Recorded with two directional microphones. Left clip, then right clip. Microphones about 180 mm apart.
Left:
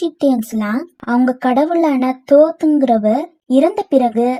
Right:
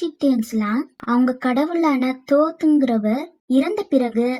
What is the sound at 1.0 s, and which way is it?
A woman's voice, 25° left (ahead or behind).